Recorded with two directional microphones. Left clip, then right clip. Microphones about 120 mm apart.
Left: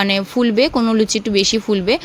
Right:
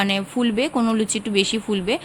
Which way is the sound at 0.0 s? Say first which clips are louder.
Left 5 dB; 45° left (ahead or behind).